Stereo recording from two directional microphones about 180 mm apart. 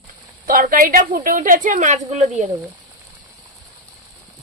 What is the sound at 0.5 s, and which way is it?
A woman's voice, 50° right (ahead or behind).